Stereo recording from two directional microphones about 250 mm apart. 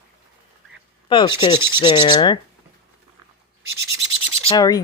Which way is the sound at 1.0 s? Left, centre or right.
Centre.